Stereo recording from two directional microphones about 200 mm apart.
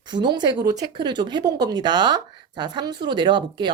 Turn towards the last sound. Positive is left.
turn(degrees=-25)  # may be behind; listen again after turning